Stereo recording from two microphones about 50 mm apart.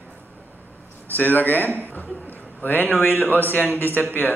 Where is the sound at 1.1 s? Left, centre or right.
Left.